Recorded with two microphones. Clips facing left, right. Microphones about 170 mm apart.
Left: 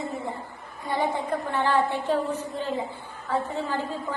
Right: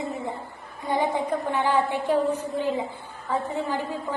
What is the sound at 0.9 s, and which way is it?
A woman's voice, 15° right (ahead or behind).